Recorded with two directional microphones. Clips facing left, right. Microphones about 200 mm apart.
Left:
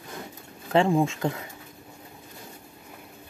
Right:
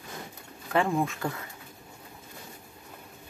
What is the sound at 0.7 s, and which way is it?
Speech, 25° left (ahead or behind).